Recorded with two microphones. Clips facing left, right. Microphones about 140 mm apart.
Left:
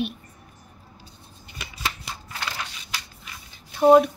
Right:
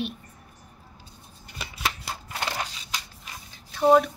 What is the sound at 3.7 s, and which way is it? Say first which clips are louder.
Speech: left 4 dB; 20° left (ahead or behind).